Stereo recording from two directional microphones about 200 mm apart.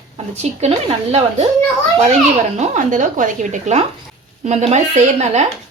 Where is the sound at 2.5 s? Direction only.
35° right (ahead or behind).